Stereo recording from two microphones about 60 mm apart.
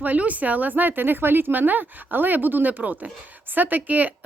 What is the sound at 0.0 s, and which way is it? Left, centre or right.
A woman's voice, right.